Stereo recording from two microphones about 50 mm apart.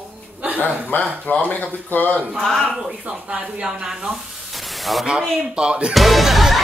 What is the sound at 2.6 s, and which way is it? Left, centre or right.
Speech, centre.